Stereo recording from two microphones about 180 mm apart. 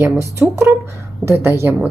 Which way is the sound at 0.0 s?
15° right (ahead or behind).